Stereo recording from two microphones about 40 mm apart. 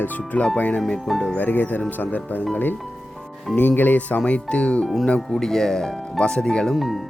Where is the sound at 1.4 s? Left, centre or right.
Left.